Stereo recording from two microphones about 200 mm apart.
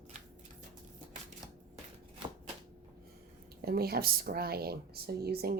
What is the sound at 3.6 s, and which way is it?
Speech, 50° right (ahead or behind).